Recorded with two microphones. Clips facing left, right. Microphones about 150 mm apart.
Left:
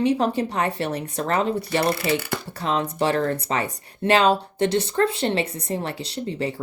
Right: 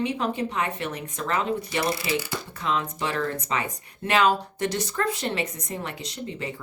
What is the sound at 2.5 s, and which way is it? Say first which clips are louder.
Speech: left 4 dB; 35° left (ahead or behind).